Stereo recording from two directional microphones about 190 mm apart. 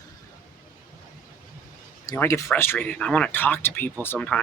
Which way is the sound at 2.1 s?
15° left (ahead or behind).